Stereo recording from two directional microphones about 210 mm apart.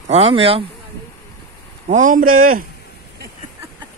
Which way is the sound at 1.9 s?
40° right (ahead or behind).